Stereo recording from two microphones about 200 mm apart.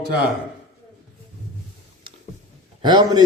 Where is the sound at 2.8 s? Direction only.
20° right (ahead or behind).